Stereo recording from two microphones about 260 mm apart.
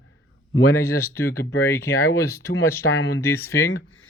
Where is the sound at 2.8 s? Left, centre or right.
Left.